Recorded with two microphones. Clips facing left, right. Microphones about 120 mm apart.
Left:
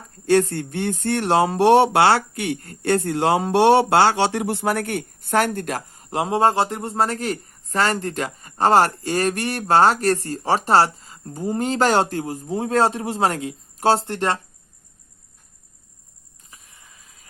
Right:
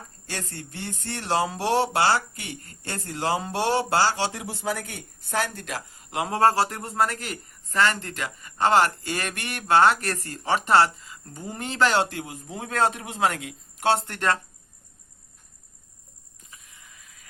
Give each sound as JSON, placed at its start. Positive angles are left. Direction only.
{"t": 0.3, "sound": "speech", "side_deg": 60}
{"t": 6.1, "sound": "a man's voice", "side_deg": 20}
{"t": 16.5, "sound": "a sound", "side_deg": 30}